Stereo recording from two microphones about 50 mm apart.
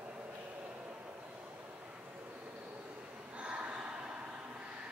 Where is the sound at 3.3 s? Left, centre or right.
Right.